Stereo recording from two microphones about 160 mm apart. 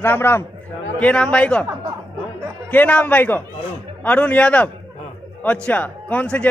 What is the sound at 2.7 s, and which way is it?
A man's voice, 10° left (ahead or behind).